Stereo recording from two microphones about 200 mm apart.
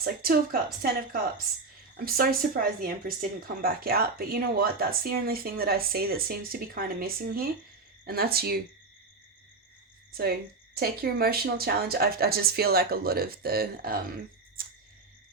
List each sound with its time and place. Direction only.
0.0 s speech: 50° right (ahead or behind)
10.1 s speech: 50° right (ahead or behind)